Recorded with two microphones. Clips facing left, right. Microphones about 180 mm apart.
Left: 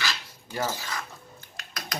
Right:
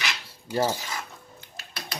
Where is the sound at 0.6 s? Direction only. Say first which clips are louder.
Right 2 dB; 15° right (ahead or behind).